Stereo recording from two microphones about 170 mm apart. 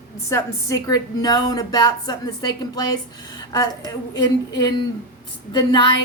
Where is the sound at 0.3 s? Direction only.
20° left (ahead or behind).